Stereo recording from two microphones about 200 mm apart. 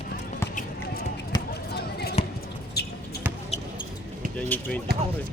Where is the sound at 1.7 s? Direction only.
55° left (ahead or behind).